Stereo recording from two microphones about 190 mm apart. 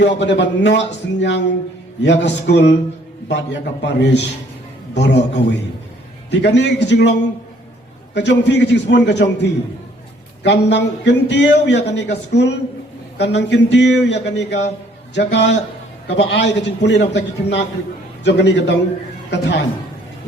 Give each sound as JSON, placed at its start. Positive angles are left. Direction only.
{"t": 0.0, "sound": "a man's voice", "side_deg": 65}
{"t": 13.1, "sound": "a man's voice", "side_deg": 65}